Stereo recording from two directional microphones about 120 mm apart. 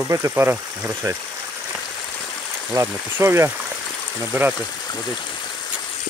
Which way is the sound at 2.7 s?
25° right (ahead or behind).